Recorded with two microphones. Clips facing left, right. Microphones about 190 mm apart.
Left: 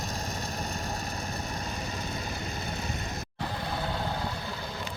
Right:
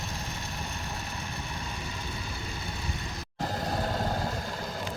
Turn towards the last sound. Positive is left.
turn(degrees=-45)  # may be behind; listen again after turning